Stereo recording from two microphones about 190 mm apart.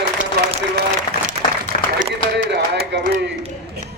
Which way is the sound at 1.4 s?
25° right (ahead or behind).